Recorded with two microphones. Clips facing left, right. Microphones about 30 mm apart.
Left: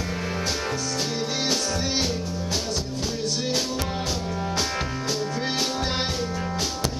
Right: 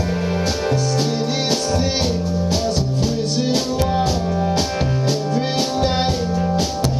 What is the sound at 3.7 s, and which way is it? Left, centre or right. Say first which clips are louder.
Music: right 9 dB; centre.